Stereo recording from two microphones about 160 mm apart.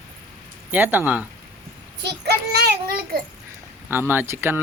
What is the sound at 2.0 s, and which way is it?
A child's voice, 90° right.